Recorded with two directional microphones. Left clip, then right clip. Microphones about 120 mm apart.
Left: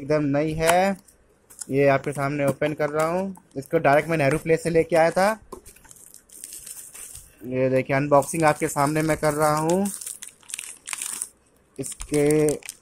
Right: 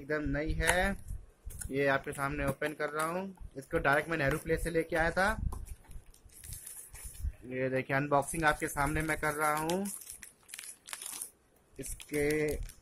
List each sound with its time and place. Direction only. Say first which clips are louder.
0.1 s speech: left 12 dB; 40° left (ahead or behind); by 2.8 s 25° left (ahead or behind)
2.8 s speech: left 11 dB; 35° left (ahead or behind)
7.4 s speech: left 11 dB; 40° left (ahead or behind)
8.0 s speech: left 11 dB; 20° left (ahead or behind)
8.3 s speech: left 9 dB; 35° left (ahead or behind)
12.3 s speech: left 12 dB; 35° left (ahead or behind)